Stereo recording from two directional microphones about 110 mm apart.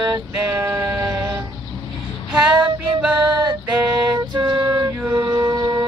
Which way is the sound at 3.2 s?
40° right (ahead or behind).